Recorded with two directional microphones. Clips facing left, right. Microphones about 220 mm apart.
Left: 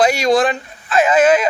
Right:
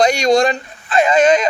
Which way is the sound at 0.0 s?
5° left (ahead or behind).